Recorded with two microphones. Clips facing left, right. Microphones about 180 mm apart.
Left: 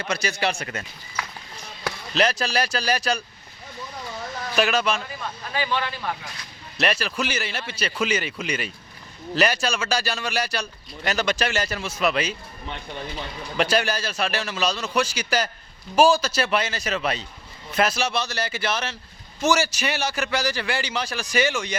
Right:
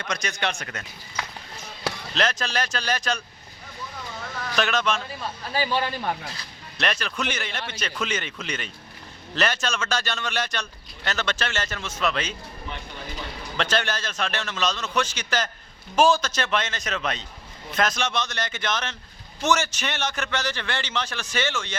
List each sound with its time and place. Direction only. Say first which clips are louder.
0.0 s speech: left 3 dB; 5° left (ahead or behind)
2.1 s speech: left 4 dB; 10° left (ahead or behind)
4.5 s speech: left 2 dB; 10° left (ahead or behind)
5.5 s a man's voice: right 1 dB; 35° right (ahead or behind)
6.7 s speech: left 3 dB; 5° left (ahead or behind)
13.6 s speech: left 4 dB; 10° left (ahead or behind)